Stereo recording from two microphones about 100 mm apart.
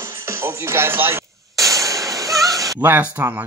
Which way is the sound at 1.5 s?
35° right (ahead or behind).